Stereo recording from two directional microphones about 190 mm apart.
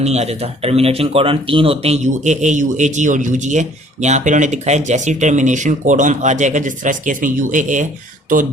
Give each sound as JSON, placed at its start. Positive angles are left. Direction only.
{"t": 0.0, "sound": "speech", "side_deg": -35}